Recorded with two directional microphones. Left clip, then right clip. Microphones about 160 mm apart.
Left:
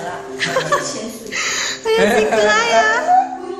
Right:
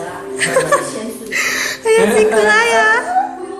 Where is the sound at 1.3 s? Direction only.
20° right (ahead or behind).